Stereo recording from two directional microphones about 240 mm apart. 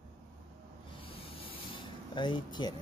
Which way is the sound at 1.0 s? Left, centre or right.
Left.